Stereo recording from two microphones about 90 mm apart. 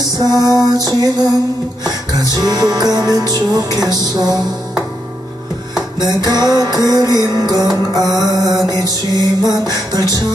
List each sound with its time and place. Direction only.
0.7 s music: 45° right (ahead or behind)
2.3 s music: 50° right (ahead or behind)
5.9 s music: 45° right (ahead or behind)